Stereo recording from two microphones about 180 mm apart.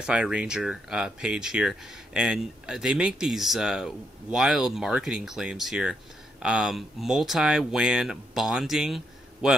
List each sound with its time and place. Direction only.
0.0 s speech: 5° right (ahead or behind)